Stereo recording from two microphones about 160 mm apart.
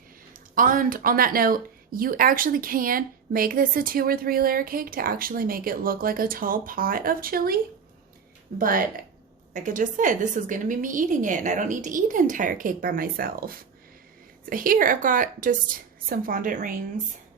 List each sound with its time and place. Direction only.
0.3 s speech: 60° right (ahead or behind)